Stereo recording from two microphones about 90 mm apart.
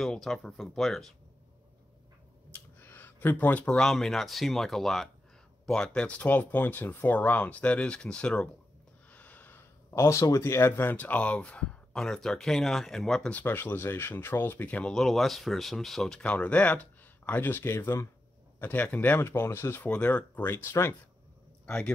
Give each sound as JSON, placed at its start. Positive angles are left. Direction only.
{"t": 0.0, "sound": "speech", "side_deg": 5}
{"t": 2.5, "sound": "speech", "side_deg": 20}
{"t": 9.1, "sound": "a sound", "side_deg": 15}
{"t": 9.8, "sound": "speech", "side_deg": 35}
{"t": 13.3, "sound": "speech", "side_deg": 20}
{"t": 14.9, "sound": "speech", "side_deg": 5}
{"t": 16.2, "sound": "speech", "side_deg": 15}
{"t": 21.6, "sound": "speech", "side_deg": 10}